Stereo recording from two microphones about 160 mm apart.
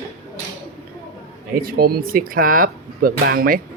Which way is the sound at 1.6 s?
70° right (ahead or behind).